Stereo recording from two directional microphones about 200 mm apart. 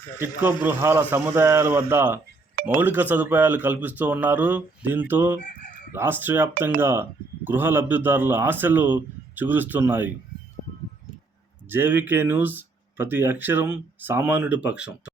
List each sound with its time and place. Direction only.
0.4 s speech: 10° right (ahead or behind)
5.4 s chicken: 40° left (ahead or behind)
5.9 s speech: 10° right (ahead or behind)
11.7 s speech: 10° right (ahead or behind)